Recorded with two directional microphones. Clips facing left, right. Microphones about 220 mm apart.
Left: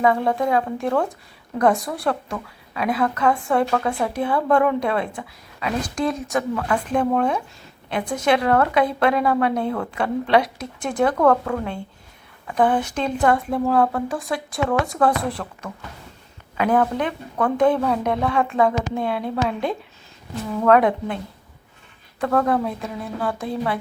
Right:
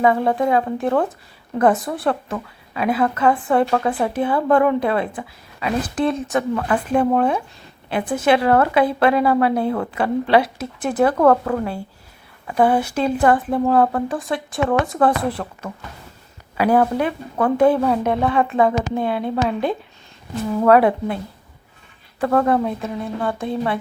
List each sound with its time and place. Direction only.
0.0 s a woman's voice: 5° right (ahead or behind)
3.7 s speech: 15° right (ahead or behind)
4.0 s a woman's voice: 5° right (ahead or behind)
22.2 s a woman's voice: 5° right (ahead or behind)